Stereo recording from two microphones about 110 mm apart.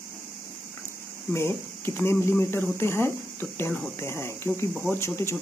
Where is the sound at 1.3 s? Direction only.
25° left (ahead or behind).